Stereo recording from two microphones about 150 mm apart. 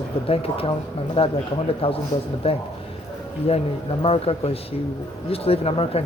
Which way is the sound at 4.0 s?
40° left (ahead or behind).